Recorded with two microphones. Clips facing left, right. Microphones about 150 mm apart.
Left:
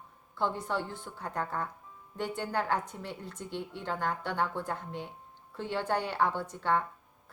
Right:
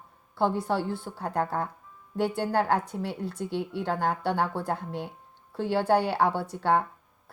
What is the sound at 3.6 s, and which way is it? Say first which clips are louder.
Speech: right 6 dB; 70° right (ahead or behind).